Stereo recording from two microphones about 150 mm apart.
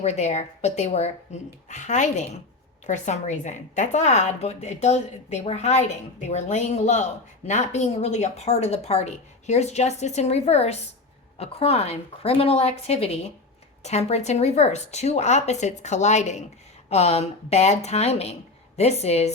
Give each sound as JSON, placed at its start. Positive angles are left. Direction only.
{"t": 0.0, "sound": "a woman's voice", "side_deg": 50}